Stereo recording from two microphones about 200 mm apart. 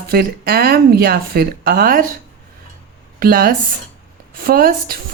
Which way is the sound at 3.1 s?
50° right (ahead or behind).